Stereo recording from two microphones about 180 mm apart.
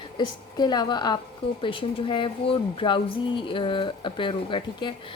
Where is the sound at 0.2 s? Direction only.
25° left (ahead or behind).